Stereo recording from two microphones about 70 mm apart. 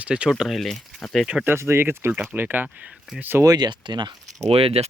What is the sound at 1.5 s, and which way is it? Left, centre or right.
Speech, right.